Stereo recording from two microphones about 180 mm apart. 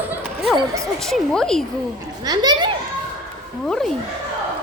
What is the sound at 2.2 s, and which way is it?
Speech, 20° right (ahead or behind).